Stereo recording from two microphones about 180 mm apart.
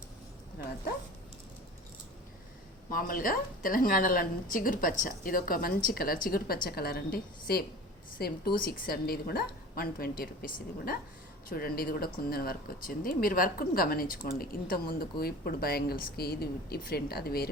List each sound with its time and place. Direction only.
2.9 s a woman's voice: 50° left (ahead or behind)